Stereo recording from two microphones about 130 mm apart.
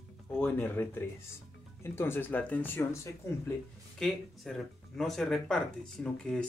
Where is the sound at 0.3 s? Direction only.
15° left (ahead or behind).